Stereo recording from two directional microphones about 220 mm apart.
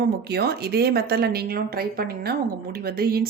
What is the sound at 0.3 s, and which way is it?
Speech, 45° right (ahead or behind).